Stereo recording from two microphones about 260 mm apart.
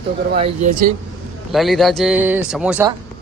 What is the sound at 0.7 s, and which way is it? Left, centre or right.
Speech, right.